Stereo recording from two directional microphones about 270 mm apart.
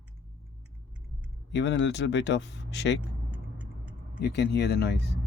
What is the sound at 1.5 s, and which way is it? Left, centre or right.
Speech, left.